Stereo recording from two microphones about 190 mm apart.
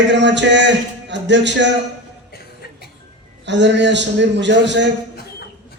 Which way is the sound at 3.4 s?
65° right (ahead or behind).